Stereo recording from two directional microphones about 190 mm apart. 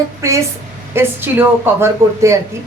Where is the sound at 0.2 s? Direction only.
15° right (ahead or behind).